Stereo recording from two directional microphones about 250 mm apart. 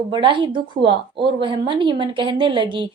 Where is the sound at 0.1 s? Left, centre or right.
Centre.